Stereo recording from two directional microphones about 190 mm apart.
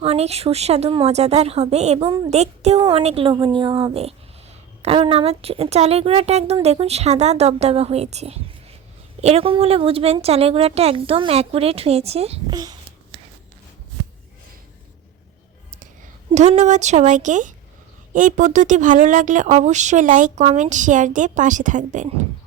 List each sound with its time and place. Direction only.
0.0 s a woman's voice: 35° right (ahead or behind)
12.5 s whispering: 20° right (ahead or behind)
16.3 s speech: 35° right (ahead or behind)